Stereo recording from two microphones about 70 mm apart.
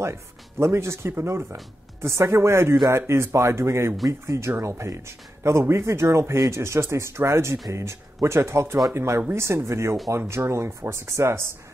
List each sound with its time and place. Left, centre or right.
0.0 s speech: right